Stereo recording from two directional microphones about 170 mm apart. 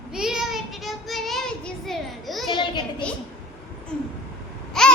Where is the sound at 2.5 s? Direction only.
25° left (ahead or behind).